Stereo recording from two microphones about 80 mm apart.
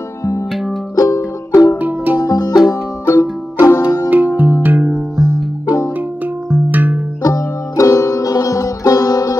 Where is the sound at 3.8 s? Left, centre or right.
Left.